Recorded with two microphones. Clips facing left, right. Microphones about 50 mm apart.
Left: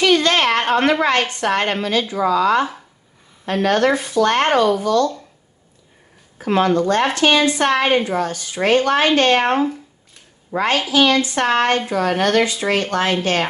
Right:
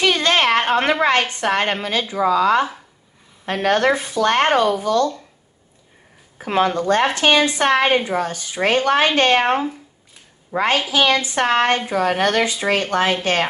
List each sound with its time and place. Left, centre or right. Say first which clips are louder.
0.0 s a sound: left 2 dB; right
1.0 s a woman's voice: even; right
6.3 s a woman's voice: left 2 dB; centre
9.4 s speech: left 1 dB; centre
10.5 s a woman's voice: left 1 dB; right